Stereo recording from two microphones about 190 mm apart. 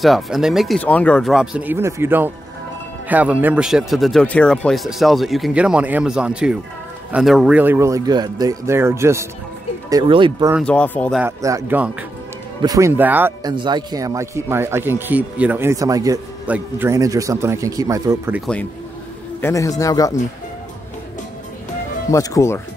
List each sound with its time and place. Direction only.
0.0 s speech: centre (ahead or behind); by 10.5 s 25° right (ahead or behind)
10.6 s a man's voice: 5° left (ahead or behind)
11.1 s speech: 15° right (ahead or behind)
13.4 s speech: 20° right (ahead or behind)
19.4 s a man's voice: 15° left (ahead or behind)
22.1 s a man's voice: 15° left (ahead or behind)